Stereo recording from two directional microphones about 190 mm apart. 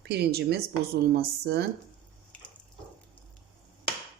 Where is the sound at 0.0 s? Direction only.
55° right (ahead or behind).